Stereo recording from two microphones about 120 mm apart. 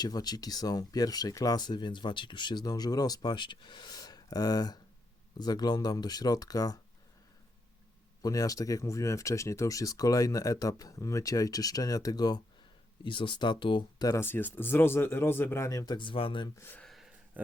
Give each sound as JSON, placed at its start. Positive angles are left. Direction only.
{"t": 0.0, "sound": "speech", "side_deg": 35}
{"t": 8.2, "sound": "speech", "side_deg": 30}
{"t": 13.1, "sound": "speech", "side_deg": 45}
{"t": 14.2, "sound": "speech", "side_deg": 15}
{"t": 16.0, "sound": "speech", "side_deg": 45}
{"t": 16.6, "sound": "speech", "side_deg": 15}
{"t": 16.8, "sound": "a sound", "side_deg": 0}
{"t": 17.4, "sound": "speech", "side_deg": -15}